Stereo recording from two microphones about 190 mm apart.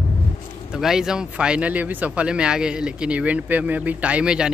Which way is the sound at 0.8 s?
5° right (ahead or behind).